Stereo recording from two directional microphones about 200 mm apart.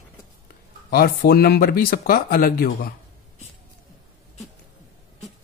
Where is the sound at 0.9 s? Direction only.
50° left (ahead or behind).